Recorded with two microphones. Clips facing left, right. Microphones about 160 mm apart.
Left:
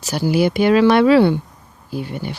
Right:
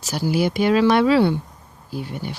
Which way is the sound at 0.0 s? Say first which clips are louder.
Left 4 dB; 65° left (ahead or behind).